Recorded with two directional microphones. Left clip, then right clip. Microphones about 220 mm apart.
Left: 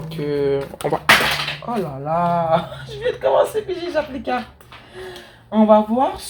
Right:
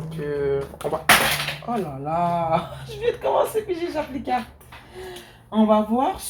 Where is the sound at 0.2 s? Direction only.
45° left (ahead or behind).